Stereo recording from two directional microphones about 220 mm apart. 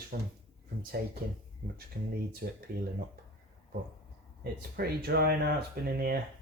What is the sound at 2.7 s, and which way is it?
Speech, 45° right (ahead or behind).